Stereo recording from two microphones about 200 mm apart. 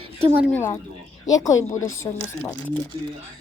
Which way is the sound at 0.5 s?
10° left (ahead or behind).